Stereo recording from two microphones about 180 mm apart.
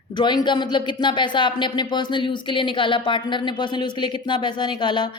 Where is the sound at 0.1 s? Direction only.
25° left (ahead or behind).